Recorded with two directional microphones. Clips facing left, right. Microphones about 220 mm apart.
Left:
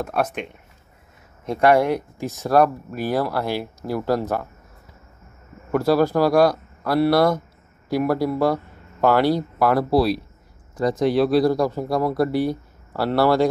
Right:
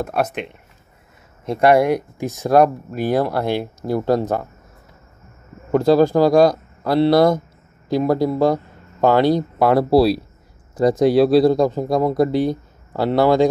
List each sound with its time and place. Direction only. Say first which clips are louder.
0.0 s speech: right 2 dB; 10° right (ahead or behind)
1.5 s speech: right 3 dB; 10° right (ahead or behind)
5.7 s speech: right 4 dB; 20° right (ahead or behind)